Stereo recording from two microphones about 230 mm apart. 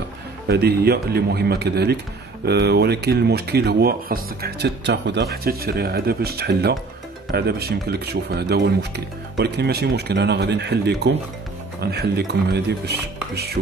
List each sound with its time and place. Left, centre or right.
0.5 s speech: right